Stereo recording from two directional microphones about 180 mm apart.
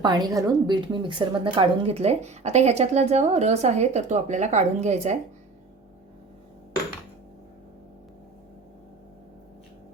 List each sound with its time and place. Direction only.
0.0 s a woman's voice: 20° right (ahead or behind); by 5.1 s 40° right (ahead or behind)